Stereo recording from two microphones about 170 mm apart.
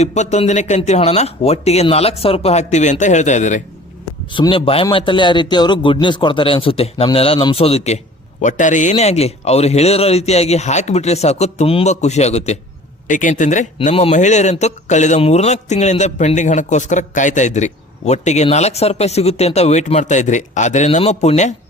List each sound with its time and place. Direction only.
0.0 s a man's voice: 40° left (ahead or behind)
4.3 s a man's voice: 30° left (ahead or behind)